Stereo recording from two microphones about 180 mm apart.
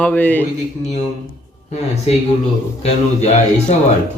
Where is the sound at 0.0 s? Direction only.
10° left (ahead or behind).